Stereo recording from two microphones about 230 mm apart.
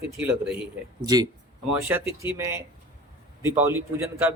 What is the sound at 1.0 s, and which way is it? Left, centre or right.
Speech, centre.